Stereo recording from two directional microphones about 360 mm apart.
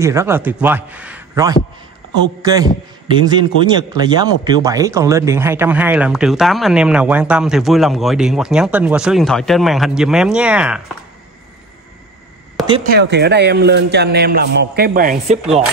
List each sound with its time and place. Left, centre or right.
0.0 s a man's voice: centre
12.6 s speech: centre
12.9 s speech: right